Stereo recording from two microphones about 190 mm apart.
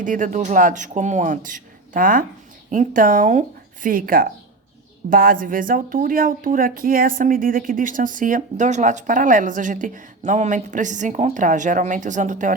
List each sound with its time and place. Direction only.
0.0 s speech: 45° right (ahead or behind)